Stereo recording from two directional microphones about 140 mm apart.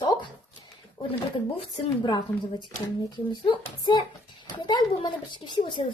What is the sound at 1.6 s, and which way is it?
Speech, 35° left (ahead or behind).